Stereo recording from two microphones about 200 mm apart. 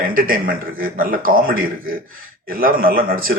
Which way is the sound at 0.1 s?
45° right (ahead or behind).